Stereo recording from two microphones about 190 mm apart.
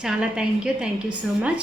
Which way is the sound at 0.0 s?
5° right (ahead or behind).